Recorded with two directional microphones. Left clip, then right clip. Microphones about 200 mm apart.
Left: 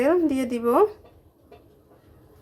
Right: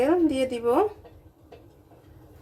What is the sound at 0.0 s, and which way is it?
Speech, 40° left (ahead or behind).